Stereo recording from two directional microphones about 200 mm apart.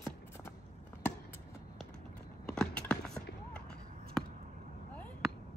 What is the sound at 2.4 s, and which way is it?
Clip-clop, 5° left (ahead or behind).